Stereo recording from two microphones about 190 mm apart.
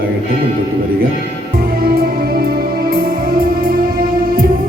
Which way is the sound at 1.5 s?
55° right (ahead or behind).